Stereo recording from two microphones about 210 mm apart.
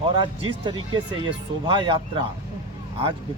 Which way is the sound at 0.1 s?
20° right (ahead or behind).